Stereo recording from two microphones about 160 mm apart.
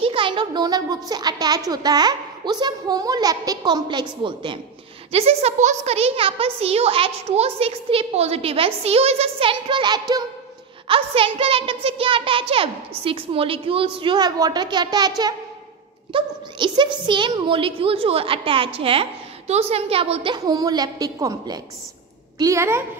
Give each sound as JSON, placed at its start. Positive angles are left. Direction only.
{"t": 0.0, "sound": "a child's voice", "side_deg": -35}
{"t": 10.9, "sound": "a child's voice", "side_deg": -35}